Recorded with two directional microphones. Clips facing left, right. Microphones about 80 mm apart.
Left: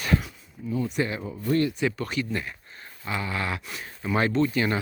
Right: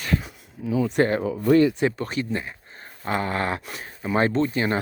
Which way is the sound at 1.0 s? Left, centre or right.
Right.